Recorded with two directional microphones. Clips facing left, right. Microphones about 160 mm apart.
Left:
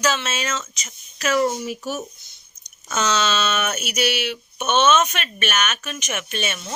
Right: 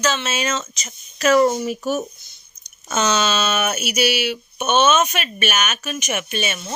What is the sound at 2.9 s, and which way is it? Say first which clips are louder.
Speech: right 2 dB; 15° right (ahead or behind).